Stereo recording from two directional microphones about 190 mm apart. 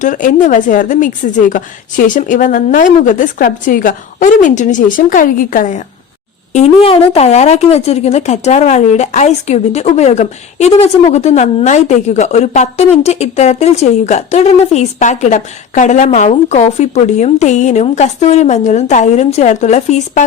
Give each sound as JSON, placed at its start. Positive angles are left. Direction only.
{"t": 0.0, "sound": "speech", "side_deg": 45}
{"t": 6.5, "sound": "speech", "side_deg": 35}